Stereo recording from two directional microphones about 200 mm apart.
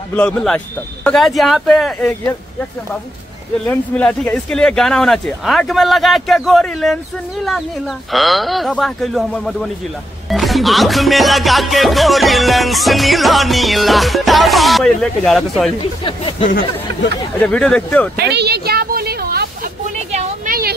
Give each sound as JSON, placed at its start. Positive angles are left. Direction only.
{"t": 0.1, "sound": "music", "side_deg": 5}
{"t": 3.6, "sound": "music", "side_deg": 10}
{"t": 16.0, "sound": "speech", "side_deg": 25}
{"t": 17.4, "sound": "music", "side_deg": 5}
{"t": 18.1, "sound": "a sound", "side_deg": -55}
{"t": 20.1, "sound": "a sound", "side_deg": -35}